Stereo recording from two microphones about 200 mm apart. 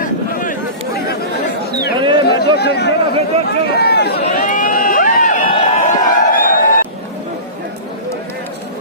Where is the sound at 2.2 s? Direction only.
55° left (ahead or behind).